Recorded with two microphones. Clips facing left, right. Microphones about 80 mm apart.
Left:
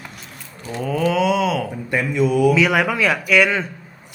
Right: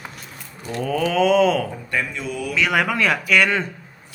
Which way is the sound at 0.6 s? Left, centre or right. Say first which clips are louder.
Left 2 dB; centre.